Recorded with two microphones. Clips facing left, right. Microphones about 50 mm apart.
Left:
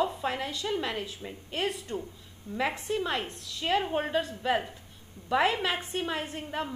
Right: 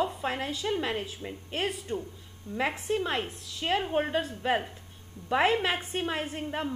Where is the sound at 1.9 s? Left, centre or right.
Centre.